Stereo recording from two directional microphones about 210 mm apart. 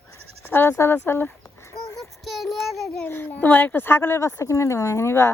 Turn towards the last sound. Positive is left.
turn(degrees=10)  # may be behind; listen again after turning